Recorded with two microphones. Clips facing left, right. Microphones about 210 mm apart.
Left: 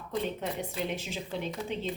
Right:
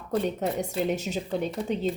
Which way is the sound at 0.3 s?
40° right (ahead or behind).